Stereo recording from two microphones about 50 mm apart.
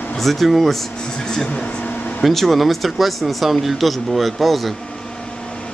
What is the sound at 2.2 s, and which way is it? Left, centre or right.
Speech, centre.